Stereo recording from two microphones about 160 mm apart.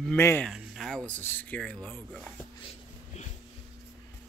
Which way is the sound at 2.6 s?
45° left (ahead or behind).